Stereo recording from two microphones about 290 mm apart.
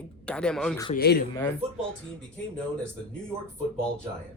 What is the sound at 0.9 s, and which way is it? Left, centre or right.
Speech, left.